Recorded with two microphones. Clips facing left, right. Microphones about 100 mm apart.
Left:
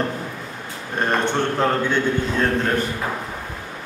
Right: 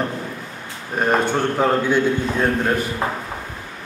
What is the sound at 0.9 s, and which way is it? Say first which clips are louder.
A man's voice: right 2 dB; 5° right (ahead or behind).